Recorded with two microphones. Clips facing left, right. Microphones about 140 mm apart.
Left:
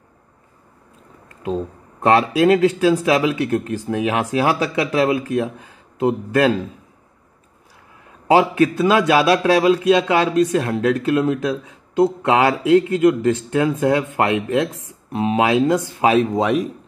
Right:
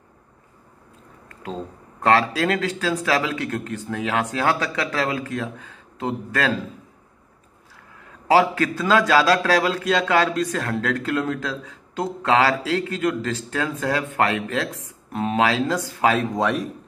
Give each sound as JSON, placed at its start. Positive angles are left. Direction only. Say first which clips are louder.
{"t": 1.3, "sound": "speech", "louder": "left 8 dB", "side_deg": 15}
{"t": 8.3, "sound": "a man's voice", "louder": "left 3 dB", "side_deg": 20}